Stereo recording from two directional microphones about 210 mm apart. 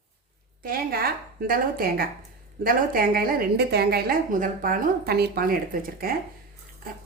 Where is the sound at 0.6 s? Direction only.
45° right (ahead or behind).